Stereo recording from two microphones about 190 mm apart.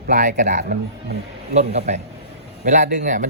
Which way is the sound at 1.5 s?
35° right (ahead or behind).